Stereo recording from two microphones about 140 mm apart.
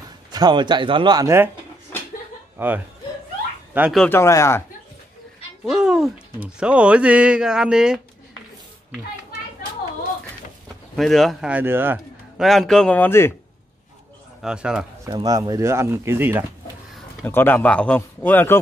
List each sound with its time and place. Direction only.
0.3 s speech: 30° right (ahead or behind)
2.5 s speech: 15° right (ahead or behind)
4.1 s speech: 20° left (ahead or behind)
5.7 s speech: 5° right (ahead or behind)
11.0 s speech: centre (ahead or behind)
11.5 s speech: 15° right (ahead or behind)
12.4 s speech: centre (ahead or behind)
14.4 s speech: 5° right (ahead or behind)
15.0 s speech: 25° right (ahead or behind)
17.2 s speech: 15° left (ahead or behind)